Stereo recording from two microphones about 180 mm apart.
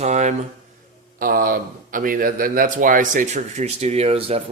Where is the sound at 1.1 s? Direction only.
50° right (ahead or behind).